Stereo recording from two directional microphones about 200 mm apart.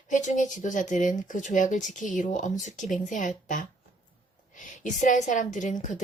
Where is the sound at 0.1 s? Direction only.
40° left (ahead or behind).